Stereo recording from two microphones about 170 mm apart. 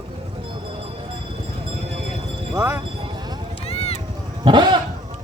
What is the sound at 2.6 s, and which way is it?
Speech, 15° right (ahead or behind).